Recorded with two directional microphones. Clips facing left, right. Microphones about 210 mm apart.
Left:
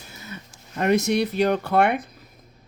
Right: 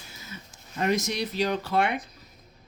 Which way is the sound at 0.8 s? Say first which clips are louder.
Left 6 dB; 60° left (ahead or behind).